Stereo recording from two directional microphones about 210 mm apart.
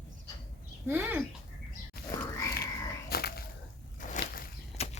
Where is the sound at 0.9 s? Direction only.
10° right (ahead or behind).